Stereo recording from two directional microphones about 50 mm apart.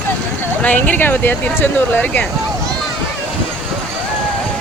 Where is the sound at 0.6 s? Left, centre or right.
Left.